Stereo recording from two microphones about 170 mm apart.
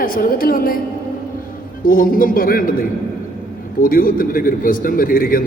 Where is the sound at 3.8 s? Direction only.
55° left (ahead or behind).